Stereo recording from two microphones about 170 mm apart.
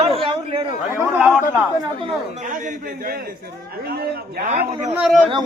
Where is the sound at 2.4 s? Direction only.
50° right (ahead or behind).